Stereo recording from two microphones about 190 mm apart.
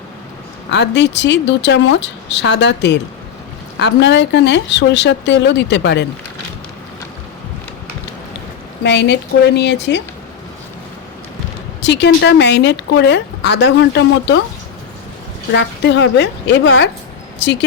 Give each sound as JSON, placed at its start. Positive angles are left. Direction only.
{"t": 0.7, "sound": "speech", "side_deg": 65}
{"t": 8.8, "sound": "a woman's voice", "side_deg": 65}
{"t": 11.8, "sound": "a woman's voice", "side_deg": 65}
{"t": 15.5, "sound": "speech", "side_deg": 70}